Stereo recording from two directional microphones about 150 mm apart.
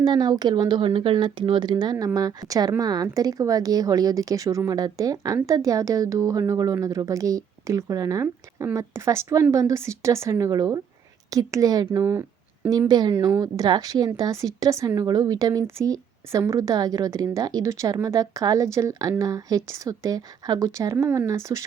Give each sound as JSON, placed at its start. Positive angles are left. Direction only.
{"t": 0.0, "sound": "speech", "side_deg": -25}